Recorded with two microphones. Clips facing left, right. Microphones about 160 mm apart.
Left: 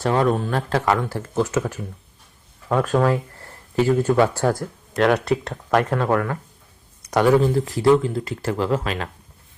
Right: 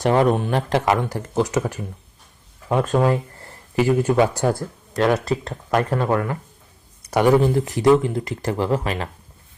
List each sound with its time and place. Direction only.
0.0 s speech: 15° right (ahead or behind)
5.1 s speech: centre (ahead or behind)
6.1 s speech: 15° right (ahead or behind)